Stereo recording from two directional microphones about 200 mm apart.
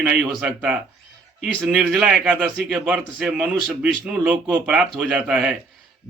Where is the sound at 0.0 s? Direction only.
5° right (ahead or behind).